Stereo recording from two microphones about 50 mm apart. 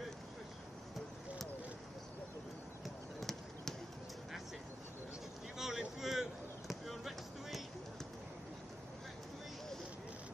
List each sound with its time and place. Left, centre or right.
2.8 s basketball bounce: centre
5.6 s vehicle: centre
6.7 s basketball bounce: centre